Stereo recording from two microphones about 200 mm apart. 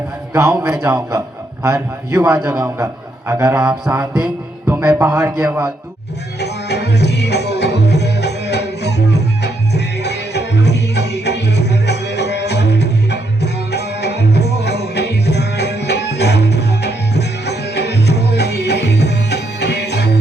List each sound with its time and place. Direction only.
0.3 s a man's voice: 15° right (ahead or behind)
6.4 s music: 55° left (ahead or behind)